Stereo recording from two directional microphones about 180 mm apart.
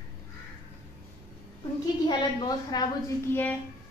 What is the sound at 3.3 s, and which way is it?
Speech, 10° left (ahead or behind).